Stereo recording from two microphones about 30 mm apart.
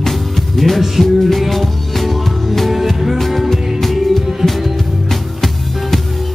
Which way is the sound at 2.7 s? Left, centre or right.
Centre.